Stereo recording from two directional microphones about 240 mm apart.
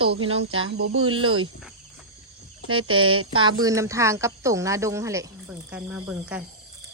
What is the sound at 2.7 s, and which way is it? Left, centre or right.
Speech, right.